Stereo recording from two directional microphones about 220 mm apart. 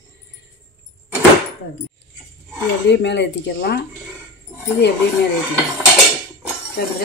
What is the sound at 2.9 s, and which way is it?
Speech, 55° left (ahead or behind).